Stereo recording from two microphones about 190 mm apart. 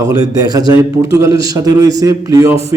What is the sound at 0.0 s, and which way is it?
A man's voice, 20° right (ahead or behind).